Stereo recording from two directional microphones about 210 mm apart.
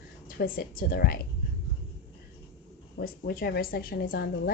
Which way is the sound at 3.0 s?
45° left (ahead or behind).